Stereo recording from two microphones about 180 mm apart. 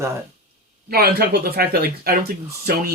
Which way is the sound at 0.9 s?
60° right (ahead or behind).